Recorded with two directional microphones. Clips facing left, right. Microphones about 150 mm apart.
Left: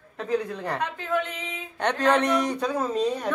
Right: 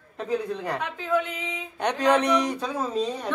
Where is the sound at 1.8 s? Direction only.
10° right (ahead or behind).